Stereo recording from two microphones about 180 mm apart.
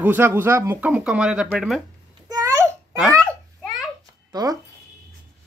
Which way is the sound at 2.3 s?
20° right (ahead or behind).